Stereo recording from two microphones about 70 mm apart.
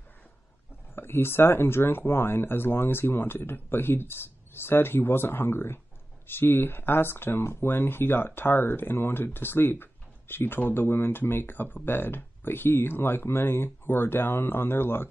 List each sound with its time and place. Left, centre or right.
0.9 s speech: left